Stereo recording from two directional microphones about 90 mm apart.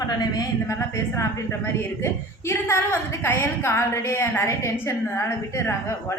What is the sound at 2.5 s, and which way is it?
A woman's voice, 30° left (ahead or behind).